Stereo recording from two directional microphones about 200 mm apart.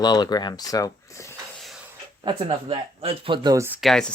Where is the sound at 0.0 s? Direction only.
20° left (ahead or behind).